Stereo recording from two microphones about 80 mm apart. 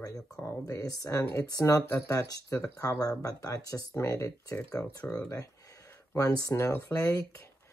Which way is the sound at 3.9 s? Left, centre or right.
Left.